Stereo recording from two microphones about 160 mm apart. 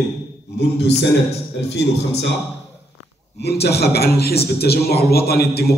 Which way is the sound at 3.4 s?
90° left.